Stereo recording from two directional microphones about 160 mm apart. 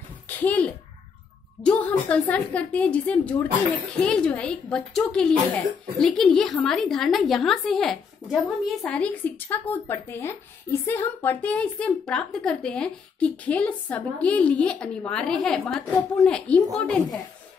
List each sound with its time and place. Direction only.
0.4 s a woman's voice: 10° left (ahead or behind)